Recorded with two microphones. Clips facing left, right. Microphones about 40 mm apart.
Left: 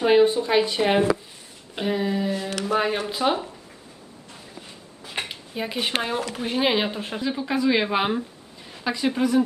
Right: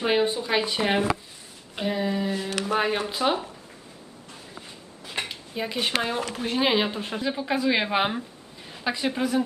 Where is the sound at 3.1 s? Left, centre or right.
Centre.